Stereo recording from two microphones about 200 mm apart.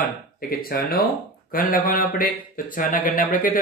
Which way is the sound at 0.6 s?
50° left (ahead or behind).